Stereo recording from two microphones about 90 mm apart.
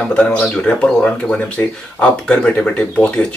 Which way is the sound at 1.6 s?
20° left (ahead or behind).